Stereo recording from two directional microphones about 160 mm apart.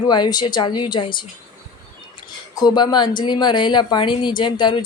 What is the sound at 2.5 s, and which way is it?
Speech, 25° left (ahead or behind).